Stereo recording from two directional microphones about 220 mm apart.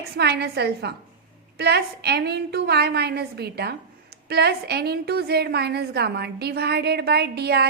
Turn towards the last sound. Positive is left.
turn(degrees=-45)  # may be behind; listen again after turning